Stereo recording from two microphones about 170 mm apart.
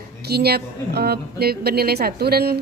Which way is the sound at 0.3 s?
70° right (ahead or behind).